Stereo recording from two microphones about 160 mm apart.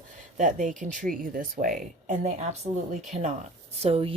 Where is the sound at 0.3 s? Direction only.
50° right (ahead or behind).